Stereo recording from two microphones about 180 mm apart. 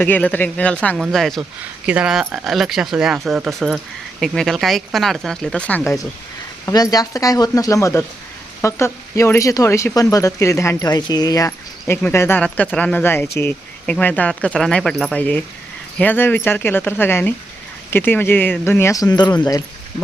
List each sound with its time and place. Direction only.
0.0 s speech: 10° left (ahead or behind)